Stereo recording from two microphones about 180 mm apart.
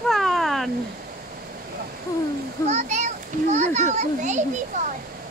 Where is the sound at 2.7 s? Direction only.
40° right (ahead or behind).